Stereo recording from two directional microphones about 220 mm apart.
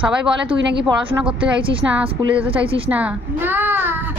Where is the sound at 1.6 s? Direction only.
25° right (ahead or behind).